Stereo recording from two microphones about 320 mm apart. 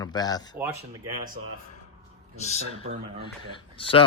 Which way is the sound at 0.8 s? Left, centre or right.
Right.